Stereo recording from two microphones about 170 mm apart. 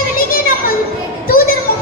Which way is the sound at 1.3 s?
60° left (ahead or behind).